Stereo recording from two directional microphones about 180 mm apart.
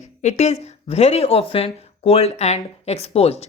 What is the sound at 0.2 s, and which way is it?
Speech, 40° left (ahead or behind).